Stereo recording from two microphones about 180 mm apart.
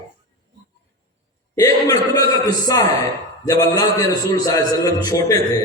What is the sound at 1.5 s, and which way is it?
A man's voice, 20° left (ahead or behind).